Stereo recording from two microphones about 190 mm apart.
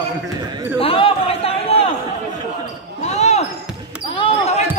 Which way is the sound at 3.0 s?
35° left (ahead or behind).